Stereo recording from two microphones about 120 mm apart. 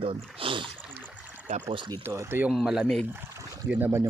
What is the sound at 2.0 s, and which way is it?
Speech, 20° right (ahead or behind).